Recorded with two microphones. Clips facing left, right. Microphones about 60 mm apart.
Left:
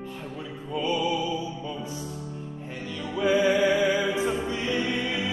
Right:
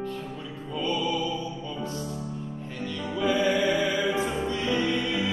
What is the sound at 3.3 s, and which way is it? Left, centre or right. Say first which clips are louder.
Music: left 3 dB; left.